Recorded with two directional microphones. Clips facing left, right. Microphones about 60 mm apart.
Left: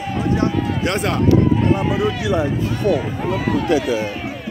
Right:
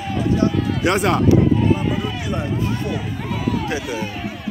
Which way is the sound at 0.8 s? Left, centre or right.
Centre.